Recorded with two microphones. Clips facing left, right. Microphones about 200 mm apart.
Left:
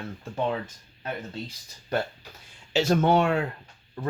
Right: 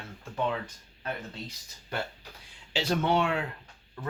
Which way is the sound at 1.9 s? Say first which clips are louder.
Left 7 dB; 40° left (ahead or behind).